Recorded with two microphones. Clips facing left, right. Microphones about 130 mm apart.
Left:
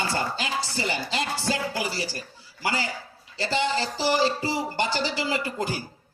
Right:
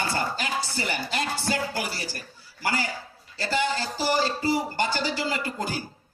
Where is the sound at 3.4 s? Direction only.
25° left (ahead or behind).